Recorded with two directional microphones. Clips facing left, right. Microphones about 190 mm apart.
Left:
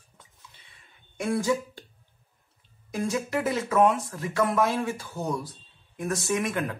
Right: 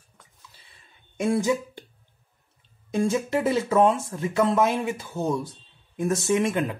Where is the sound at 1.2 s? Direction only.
20° right (ahead or behind).